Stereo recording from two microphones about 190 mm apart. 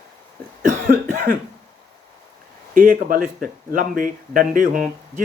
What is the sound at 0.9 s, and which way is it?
Cough, 50° right (ahead or behind).